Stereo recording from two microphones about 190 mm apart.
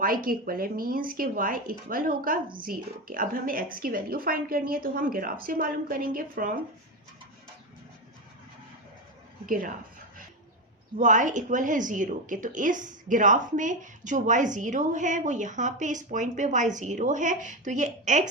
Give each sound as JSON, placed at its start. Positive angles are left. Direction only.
{"t": 0.0, "sound": "a woman's voice", "side_deg": -50}
{"t": 9.5, "sound": "a woman's voice", "side_deg": -45}
{"t": 10.9, "sound": "speech", "side_deg": -40}